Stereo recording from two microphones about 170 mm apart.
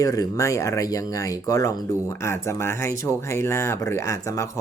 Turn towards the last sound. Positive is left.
turn(degrees=15)  # may be behind; listen again after turning